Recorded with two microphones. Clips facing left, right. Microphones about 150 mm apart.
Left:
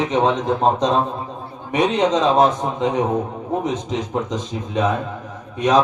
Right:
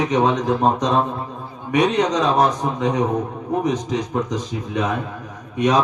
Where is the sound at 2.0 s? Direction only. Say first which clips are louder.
Left 2 dB; 25° left (ahead or behind).